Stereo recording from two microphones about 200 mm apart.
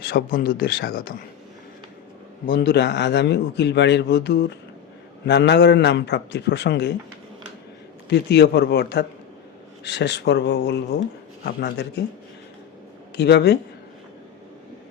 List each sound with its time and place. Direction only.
0.1 s speech: 45° left (ahead or behind)
2.5 s speech: 50° left (ahead or behind)
8.1 s speech: 55° left (ahead or behind)
13.1 s speech: 55° left (ahead or behind)